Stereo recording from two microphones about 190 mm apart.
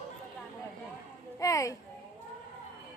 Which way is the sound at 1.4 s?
15° left (ahead or behind).